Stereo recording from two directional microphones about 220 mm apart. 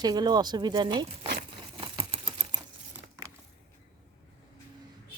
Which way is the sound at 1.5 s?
20° right (ahead or behind).